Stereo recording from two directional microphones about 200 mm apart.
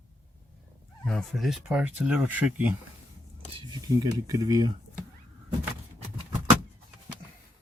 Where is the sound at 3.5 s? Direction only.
20° right (ahead or behind).